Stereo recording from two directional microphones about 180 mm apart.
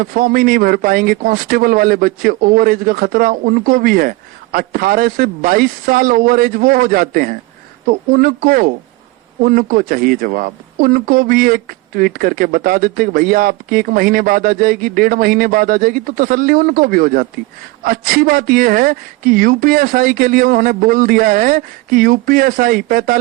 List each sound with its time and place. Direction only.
0.0 s speech: 55° right (ahead or behind)